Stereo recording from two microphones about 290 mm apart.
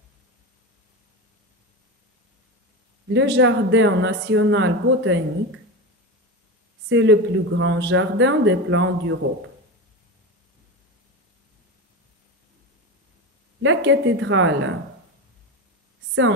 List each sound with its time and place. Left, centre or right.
3.1 s speech: right
6.9 s speech: right
13.6 s speech: right